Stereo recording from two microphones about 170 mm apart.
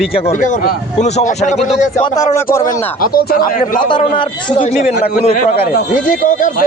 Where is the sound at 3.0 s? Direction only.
60° left (ahead or behind).